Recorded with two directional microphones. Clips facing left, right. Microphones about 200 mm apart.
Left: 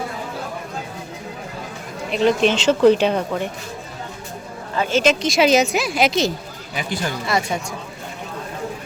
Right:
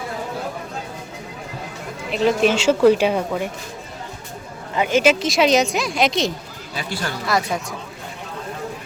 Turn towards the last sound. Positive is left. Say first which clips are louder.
# even
turn(degrees=0)  # may be behind; listen again after turning